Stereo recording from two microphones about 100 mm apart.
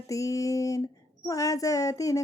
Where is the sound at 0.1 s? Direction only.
35° left (ahead or behind).